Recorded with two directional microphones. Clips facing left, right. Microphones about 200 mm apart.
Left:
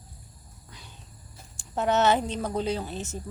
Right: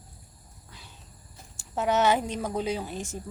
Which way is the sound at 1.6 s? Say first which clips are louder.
Left 1 dB; 10° right (ahead or behind).